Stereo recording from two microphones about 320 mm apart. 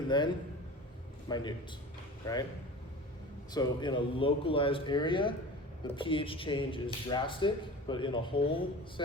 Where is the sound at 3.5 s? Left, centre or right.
Centre.